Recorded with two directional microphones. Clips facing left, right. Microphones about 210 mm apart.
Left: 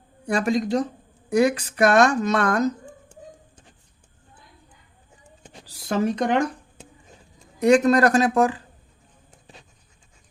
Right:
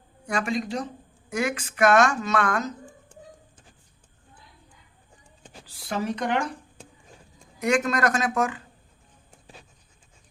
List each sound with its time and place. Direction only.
0.3 s a woman's voice: 35° left (ahead or behind)
5.6 s speech: 45° left (ahead or behind)
7.6 s a woman's voice: 35° left (ahead or behind)
9.3 s a sound: centre (ahead or behind)